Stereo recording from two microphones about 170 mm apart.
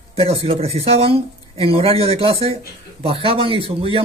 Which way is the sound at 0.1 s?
30° right (ahead or behind).